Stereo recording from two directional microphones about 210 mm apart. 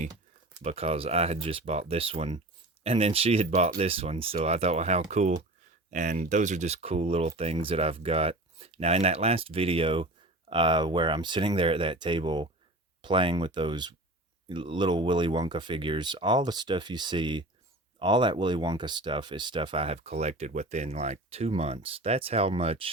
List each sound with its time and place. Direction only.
0.6 s speech: 30° right (ahead or behind)